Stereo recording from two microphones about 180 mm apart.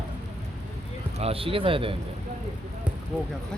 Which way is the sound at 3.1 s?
5° left (ahead or behind).